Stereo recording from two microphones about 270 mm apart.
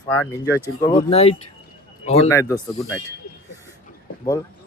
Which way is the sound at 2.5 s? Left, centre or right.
Centre.